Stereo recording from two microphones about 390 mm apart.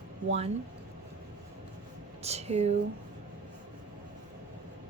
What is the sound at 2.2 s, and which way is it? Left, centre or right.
Speech, centre.